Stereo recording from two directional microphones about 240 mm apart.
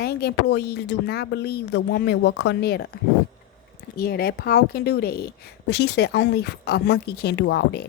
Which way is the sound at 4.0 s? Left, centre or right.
Left.